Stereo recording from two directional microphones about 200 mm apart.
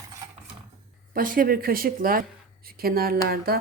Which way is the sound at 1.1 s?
45° right (ahead or behind).